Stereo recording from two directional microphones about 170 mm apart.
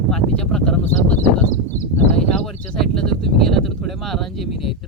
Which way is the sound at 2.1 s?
5° left (ahead or behind).